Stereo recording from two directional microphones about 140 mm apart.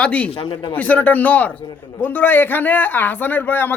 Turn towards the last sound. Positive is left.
turn(degrees=15)  # may be behind; listen again after turning